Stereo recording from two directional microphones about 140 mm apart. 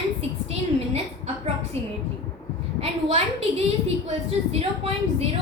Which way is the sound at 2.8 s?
45° right (ahead or behind).